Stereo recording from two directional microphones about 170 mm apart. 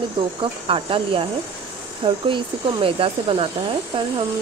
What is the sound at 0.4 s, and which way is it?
Speech, 30° right (ahead or behind).